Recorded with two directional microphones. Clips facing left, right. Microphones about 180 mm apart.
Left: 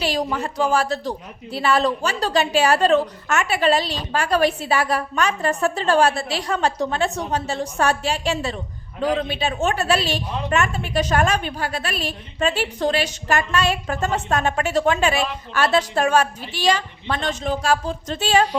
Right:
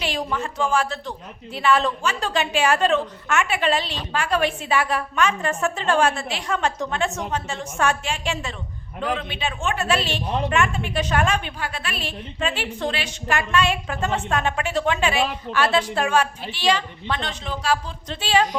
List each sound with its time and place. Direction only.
0.0 s a woman's voice: 40° left (ahead or behind)